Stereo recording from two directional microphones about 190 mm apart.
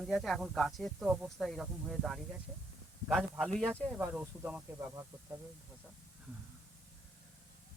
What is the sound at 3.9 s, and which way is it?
Speech, 10° right (ahead or behind).